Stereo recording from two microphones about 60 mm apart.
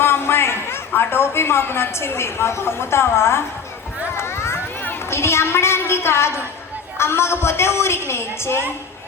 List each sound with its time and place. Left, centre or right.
0.0 s a woman's voice: left
4.1 s a sound: left
5.1 s a woman's voice: left